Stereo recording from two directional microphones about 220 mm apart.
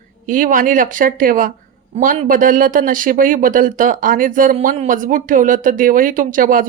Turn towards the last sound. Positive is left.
turn(degrees=-40)  # may be behind; listen again after turning